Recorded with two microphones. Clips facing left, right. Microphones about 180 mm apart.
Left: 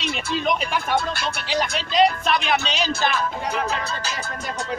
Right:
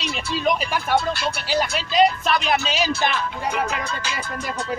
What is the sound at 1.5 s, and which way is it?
Speech, 5° right (ahead or behind).